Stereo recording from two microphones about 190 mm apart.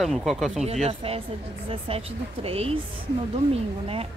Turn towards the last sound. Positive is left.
turn(degrees=-30)  # may be behind; listen again after turning